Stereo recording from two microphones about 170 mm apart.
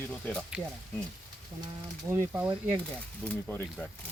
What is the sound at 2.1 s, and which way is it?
Speech, 10° right (ahead or behind).